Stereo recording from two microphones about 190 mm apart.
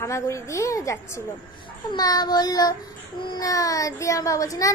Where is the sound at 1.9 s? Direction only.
20° left (ahead or behind).